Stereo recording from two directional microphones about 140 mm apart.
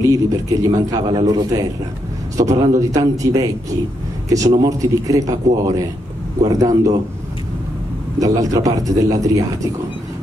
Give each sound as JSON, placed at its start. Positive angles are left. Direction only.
{"t": 0.0, "sound": "a man's voice", "side_deg": -25}
{"t": 8.2, "sound": "a man's voice", "side_deg": -25}